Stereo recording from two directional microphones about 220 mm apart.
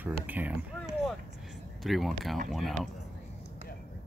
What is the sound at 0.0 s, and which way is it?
Speech, 10° right (ahead or behind).